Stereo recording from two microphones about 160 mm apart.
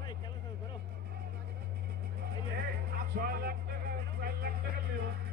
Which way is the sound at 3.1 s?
75° right (ahead or behind).